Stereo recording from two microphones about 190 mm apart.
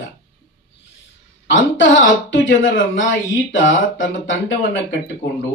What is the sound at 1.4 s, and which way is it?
Speech, 75° left (ahead or behind).